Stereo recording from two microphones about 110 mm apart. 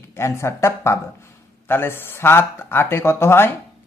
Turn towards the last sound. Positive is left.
turn(degrees=20)  # may be behind; listen again after turning